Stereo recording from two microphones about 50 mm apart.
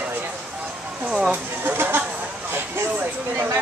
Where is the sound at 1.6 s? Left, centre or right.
Right.